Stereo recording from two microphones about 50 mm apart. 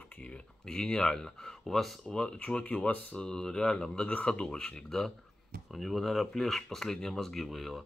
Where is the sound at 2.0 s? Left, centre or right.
Centre.